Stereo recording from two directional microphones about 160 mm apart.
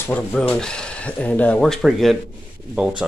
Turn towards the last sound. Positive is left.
turn(degrees=-5)  # may be behind; listen again after turning